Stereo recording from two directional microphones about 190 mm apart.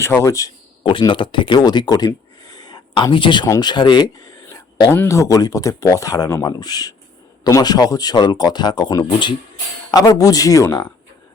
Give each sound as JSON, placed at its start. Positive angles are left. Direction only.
{"t": 0.0, "sound": "speech", "side_deg": 15}